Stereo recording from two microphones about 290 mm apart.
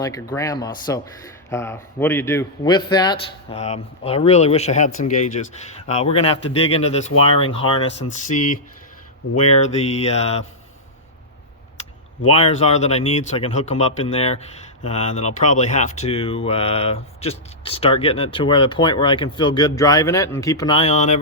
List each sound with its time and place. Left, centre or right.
0.0 s speech: centre
12.3 s speech: left